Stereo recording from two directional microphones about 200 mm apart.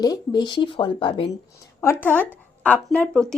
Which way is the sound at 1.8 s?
10° left (ahead or behind).